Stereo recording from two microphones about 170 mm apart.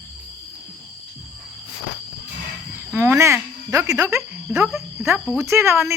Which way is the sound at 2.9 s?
15° right (ahead or behind).